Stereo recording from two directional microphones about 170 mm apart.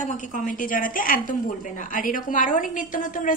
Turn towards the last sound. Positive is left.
turn(degrees=50)  # may be behind; listen again after turning